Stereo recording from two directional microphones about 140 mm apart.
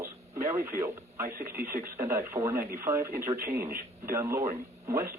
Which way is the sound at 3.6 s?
90° right.